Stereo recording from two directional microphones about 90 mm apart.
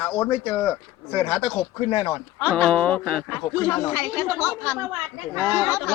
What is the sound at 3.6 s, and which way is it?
A man's voice, 30° left (ahead or behind).